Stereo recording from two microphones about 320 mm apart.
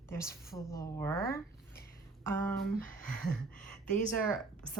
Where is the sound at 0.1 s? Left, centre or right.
Centre.